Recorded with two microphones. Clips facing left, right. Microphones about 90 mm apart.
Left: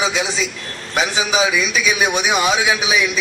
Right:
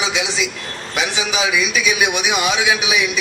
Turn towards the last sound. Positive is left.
turn(degrees=35)  # may be behind; listen again after turning